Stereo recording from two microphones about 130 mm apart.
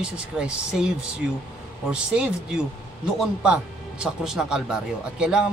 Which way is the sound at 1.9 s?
5° right (ahead or behind).